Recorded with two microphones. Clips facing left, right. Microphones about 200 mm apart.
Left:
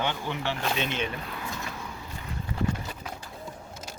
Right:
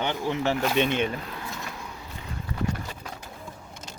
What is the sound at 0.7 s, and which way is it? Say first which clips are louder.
Speech: right 6 dB; 55° right (ahead or behind).